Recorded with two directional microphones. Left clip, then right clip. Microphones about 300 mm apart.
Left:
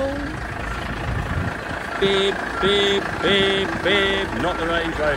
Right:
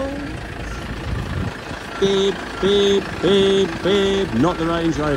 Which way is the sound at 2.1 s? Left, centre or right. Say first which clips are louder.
Even; centre.